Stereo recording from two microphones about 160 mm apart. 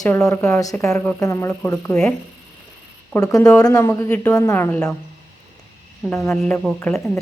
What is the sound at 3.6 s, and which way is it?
Speech, 20° left (ahead or behind).